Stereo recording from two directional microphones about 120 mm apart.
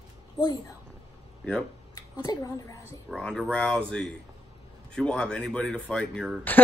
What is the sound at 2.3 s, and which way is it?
Speech, 30° left (ahead or behind).